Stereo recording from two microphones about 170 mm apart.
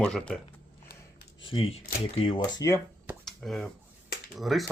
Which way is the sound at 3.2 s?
Centre (ahead or behind).